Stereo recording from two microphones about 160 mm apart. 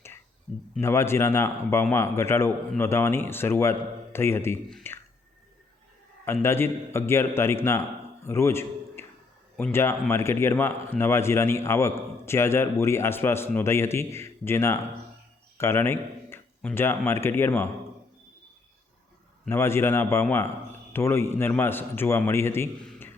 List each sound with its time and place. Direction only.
0.8 s a man's voice: 15° left (ahead or behind)
6.2 s a man's voice: 15° left (ahead or behind)
19.5 s a man's voice: 15° left (ahead or behind)